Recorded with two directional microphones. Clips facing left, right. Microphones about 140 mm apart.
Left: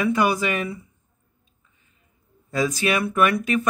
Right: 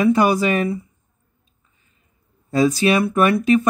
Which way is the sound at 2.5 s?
30° right (ahead or behind).